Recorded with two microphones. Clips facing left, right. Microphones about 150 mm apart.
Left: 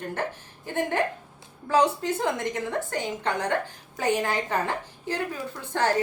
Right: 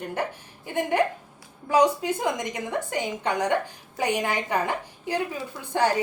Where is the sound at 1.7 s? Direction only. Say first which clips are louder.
Right 2 dB; 15° right (ahead or behind).